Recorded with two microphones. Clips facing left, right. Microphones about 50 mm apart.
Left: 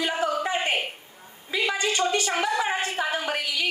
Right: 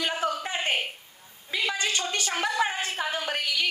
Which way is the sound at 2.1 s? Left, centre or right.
Left.